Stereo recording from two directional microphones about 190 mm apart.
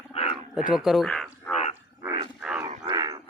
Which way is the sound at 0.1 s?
30° left (ahead or behind).